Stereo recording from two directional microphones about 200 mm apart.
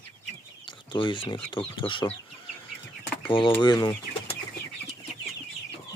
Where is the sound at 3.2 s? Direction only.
25° left (ahead or behind).